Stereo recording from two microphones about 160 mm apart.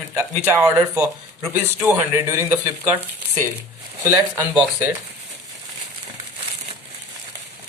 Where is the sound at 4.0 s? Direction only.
15° right (ahead or behind).